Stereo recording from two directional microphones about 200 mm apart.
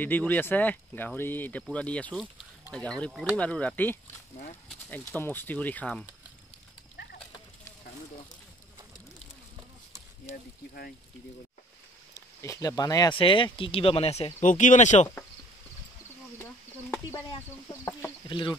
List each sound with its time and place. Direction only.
0.0 s speech: 10° left (ahead or behind)
12.4 s speech: 15° left (ahead or behind); by 15.0 s 35° left (ahead or behind)
16.9 s speech: 15° left (ahead or behind)
18.3 s speech: 25° left (ahead or behind)